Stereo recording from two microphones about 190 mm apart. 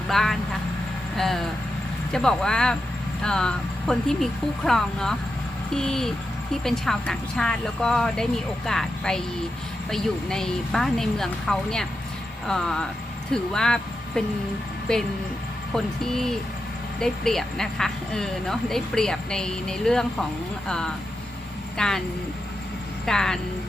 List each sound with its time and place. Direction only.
0.1 s speech: centre (ahead or behind)
23.0 s speech: 5° left (ahead or behind)